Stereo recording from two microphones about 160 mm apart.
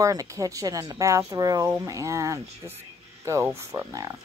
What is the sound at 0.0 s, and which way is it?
Speech, 20° right (ahead or behind).